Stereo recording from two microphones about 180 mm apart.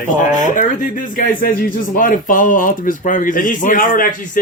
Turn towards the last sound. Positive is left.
turn(degrees=50)  # may be behind; listen again after turning